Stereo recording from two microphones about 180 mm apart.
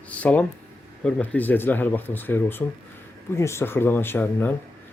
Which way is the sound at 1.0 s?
10° left (ahead or behind).